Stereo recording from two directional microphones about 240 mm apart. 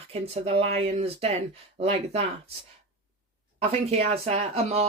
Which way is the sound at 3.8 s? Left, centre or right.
Right.